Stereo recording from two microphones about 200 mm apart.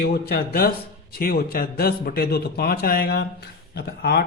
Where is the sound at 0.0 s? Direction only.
50° left (ahead or behind).